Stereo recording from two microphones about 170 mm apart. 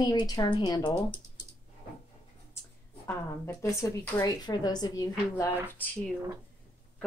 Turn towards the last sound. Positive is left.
turn(degrees=10)  # may be behind; listen again after turning